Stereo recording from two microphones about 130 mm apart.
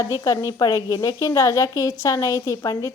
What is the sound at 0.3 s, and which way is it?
A woman's voice, 25° left (ahead or behind).